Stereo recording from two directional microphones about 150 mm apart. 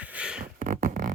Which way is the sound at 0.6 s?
60° right (ahead or behind).